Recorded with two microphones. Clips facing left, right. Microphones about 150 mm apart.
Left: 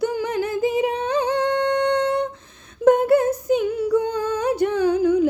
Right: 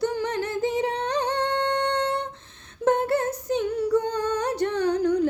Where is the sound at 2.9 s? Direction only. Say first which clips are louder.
Left 6 dB; 25° right (ahead or behind).